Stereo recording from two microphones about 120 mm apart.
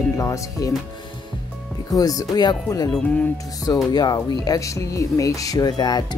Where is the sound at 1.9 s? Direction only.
30° left (ahead or behind).